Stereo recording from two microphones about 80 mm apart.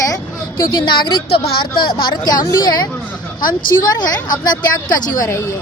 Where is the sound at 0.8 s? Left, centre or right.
Left.